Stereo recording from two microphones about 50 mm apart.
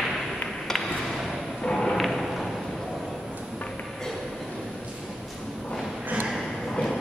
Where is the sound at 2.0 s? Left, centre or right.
Centre.